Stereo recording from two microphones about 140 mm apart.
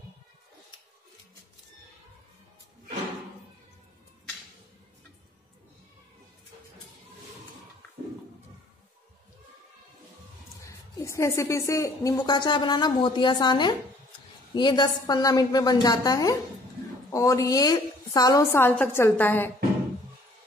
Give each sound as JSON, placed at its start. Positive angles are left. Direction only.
{"t": 10.6, "sound": "a woman's voice", "side_deg": 20}
{"t": 18.5, "sound": "a woman's voice", "side_deg": 15}